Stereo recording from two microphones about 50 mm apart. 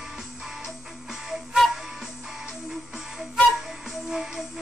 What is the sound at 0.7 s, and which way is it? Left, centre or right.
Music, centre.